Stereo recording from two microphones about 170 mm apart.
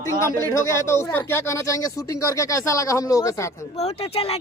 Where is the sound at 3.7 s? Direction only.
35° left (ahead or behind).